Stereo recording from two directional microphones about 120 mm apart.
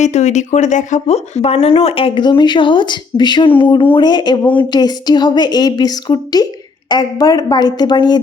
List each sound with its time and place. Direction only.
0.0 s a woman's voice: 70° left (ahead or behind); by 8.2 s 40° left (ahead or behind)